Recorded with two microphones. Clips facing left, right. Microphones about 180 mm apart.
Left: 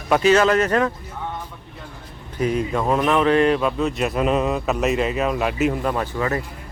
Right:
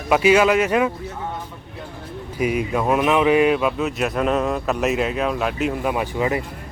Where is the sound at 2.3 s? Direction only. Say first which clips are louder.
Even; 10° right (ahead or behind).